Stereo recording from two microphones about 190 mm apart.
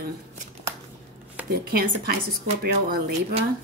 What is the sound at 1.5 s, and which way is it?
Speech, 55° right (ahead or behind).